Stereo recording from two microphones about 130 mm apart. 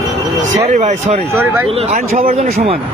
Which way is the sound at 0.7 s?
60° right (ahead or behind).